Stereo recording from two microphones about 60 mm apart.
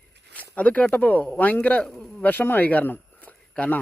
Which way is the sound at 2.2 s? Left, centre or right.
Left.